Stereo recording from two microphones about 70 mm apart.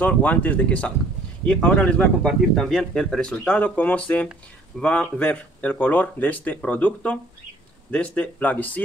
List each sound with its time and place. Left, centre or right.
0.0 s speech: left